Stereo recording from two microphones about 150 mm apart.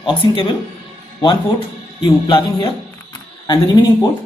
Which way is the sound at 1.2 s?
35° left (ahead or behind).